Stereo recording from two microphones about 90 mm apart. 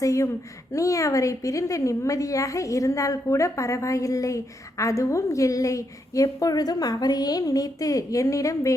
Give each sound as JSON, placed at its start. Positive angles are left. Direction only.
{"t": 0.0, "sound": "a woman's voice", "side_deg": 35}